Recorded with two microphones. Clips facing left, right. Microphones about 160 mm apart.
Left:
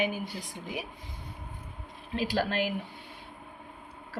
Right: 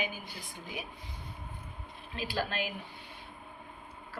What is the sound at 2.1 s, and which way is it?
Speech, 90° left.